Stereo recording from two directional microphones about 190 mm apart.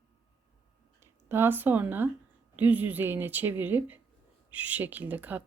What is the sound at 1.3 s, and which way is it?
Speech, 10° right (ahead or behind).